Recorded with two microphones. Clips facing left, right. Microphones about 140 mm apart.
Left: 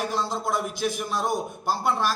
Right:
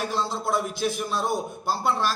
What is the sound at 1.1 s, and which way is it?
Speech, 15° left (ahead or behind).